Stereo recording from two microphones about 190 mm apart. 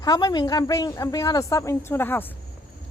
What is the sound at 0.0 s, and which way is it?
A woman's voice, 20° left (ahead or behind).